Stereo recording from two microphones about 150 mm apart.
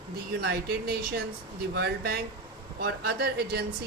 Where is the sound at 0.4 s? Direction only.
90° right.